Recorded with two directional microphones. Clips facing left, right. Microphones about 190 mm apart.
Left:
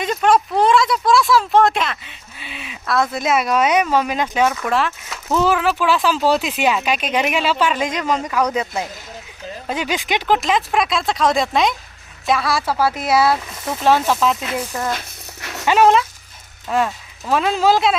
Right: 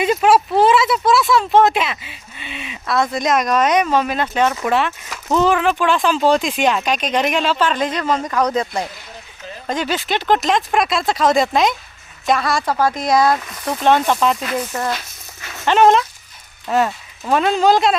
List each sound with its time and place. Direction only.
0.0 s speech: 5° right (ahead or behind); by 4.5 s 10° left (ahead or behind)
4.6 s speech: centre (ahead or behind)
14.9 s a sound: 70° left (ahead or behind)
15.6 s speech: 5° left (ahead or behind)